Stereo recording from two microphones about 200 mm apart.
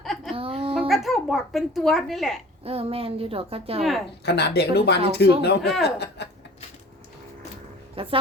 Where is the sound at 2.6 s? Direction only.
30° right (ahead or behind).